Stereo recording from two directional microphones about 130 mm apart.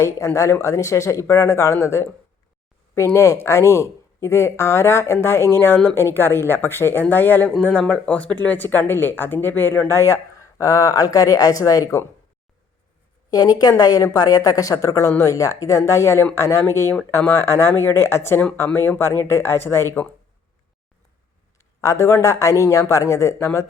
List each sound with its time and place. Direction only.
0.0 s speech: 20° left (ahead or behind)
13.3 s speech: 30° left (ahead or behind)
21.8 s speech: 25° left (ahead or behind)